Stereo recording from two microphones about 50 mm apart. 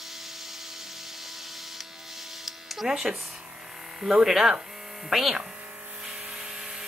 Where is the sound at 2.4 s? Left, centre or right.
Centre.